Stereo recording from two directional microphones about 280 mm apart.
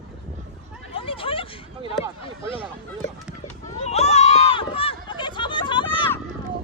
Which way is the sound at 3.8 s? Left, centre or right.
Left.